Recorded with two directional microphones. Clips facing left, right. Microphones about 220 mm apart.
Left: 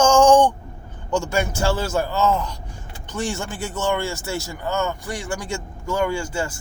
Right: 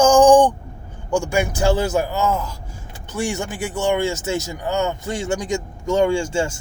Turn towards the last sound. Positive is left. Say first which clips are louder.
# right 5 dB
turn(degrees=-25)  # may be behind; listen again after turning